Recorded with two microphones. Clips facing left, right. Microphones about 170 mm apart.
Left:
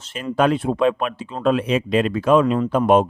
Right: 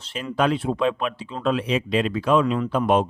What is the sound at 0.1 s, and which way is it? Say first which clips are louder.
Speech: left 3 dB; 50° left (ahead or behind).